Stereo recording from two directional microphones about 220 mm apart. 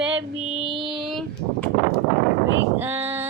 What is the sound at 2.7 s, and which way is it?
Female singing, 10° right (ahead or behind).